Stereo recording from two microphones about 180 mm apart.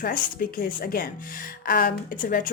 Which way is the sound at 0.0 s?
50° left (ahead or behind).